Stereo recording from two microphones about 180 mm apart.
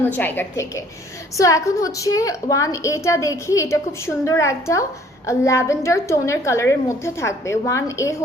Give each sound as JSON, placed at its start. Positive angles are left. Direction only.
{"t": 0.2, "sound": "a woman's voice", "side_deg": 10}